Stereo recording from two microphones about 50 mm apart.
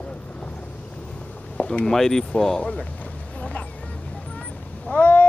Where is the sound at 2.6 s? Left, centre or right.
Left.